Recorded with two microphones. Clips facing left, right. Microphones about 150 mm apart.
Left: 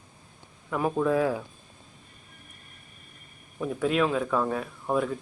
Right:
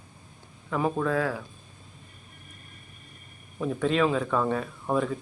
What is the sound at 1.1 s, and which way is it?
Speech, 15° left (ahead or behind).